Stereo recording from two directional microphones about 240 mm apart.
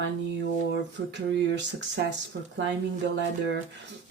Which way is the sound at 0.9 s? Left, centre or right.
Right.